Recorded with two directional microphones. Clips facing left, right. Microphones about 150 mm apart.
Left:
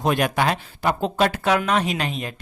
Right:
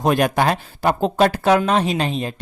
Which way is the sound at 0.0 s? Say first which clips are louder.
Right 3 dB; 45° right (ahead or behind).